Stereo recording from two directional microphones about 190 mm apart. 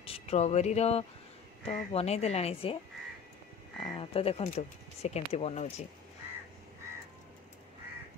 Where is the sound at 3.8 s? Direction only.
30° left (ahead or behind).